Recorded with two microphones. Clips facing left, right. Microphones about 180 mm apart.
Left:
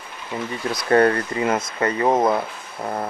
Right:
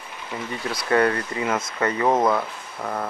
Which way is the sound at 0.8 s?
40° left (ahead or behind).